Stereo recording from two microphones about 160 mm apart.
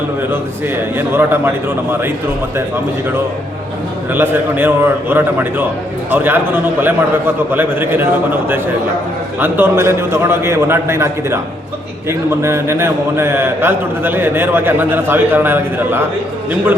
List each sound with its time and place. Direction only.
0.3 s a man's voice: 15° right (ahead or behind)
4.1 s a man's voice: 10° right (ahead or behind)